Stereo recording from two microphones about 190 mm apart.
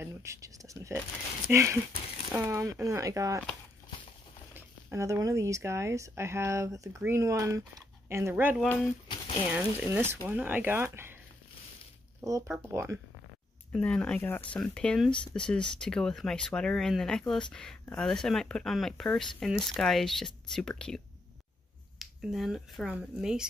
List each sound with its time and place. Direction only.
0.0 s speech: 15° right (ahead or behind)
4.6 s speech: 15° right (ahead or behind)
8.6 s speech: 10° left (ahead or behind)
9.5 s speech: 10° right (ahead or behind)
12.2 s speech: 15° right (ahead or behind)
13.7 s speech: 5° left (ahead or behind)